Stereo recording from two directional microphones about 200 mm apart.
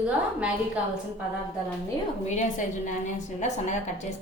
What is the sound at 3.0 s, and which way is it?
Speech, 35° left (ahead or behind).